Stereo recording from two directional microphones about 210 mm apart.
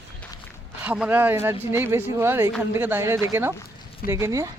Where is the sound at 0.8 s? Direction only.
5° right (ahead or behind).